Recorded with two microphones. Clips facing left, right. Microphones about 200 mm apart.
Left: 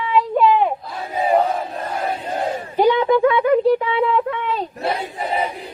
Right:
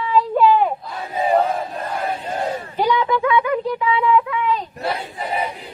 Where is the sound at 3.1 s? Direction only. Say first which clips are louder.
Left 4 dB; 40° left (ahead or behind).